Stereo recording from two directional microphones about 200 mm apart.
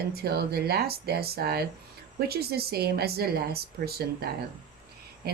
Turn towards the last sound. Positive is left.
turn(degrees=-50)  # may be behind; listen again after turning